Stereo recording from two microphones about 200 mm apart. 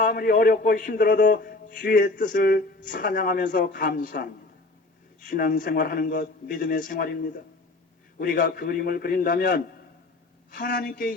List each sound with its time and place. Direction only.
0.0 s a man's voice: 45° left (ahead or behind)